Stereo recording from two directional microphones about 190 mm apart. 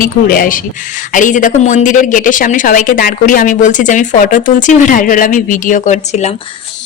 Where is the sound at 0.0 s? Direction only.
45° left (ahead or behind).